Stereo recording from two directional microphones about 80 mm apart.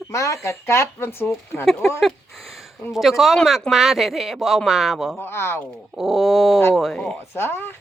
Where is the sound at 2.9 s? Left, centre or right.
Centre.